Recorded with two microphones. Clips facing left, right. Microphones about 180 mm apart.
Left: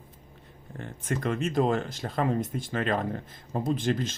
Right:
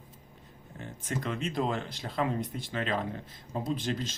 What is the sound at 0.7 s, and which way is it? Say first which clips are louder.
Speech: left 4 dB; 55° left (ahead or behind).